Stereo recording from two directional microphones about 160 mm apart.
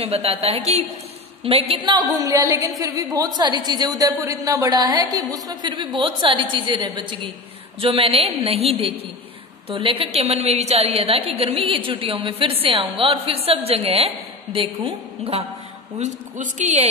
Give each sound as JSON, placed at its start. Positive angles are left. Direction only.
{"t": 0.0, "sound": "a woman's voice", "side_deg": -40}
{"t": 16.0, "sound": "a woman's voice", "side_deg": -45}